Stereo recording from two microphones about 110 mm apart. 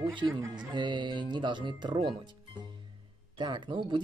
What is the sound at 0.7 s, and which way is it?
Speech, 45° right (ahead or behind).